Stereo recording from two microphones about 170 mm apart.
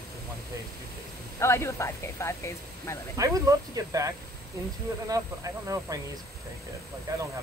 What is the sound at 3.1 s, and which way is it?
Speech, 20° right (ahead or behind).